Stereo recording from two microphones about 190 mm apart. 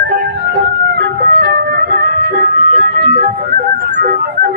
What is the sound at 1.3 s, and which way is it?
Music, 50° right (ahead or behind).